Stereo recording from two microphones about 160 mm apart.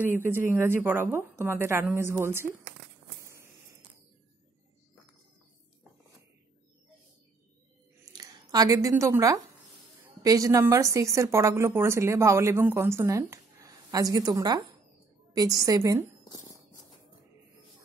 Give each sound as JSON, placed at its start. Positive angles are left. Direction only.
{"t": 0.0, "sound": "speech", "side_deg": -15}
{"t": 8.0, "sound": "a sound", "side_deg": -20}
{"t": 10.2, "sound": "a woman's voice", "side_deg": -20}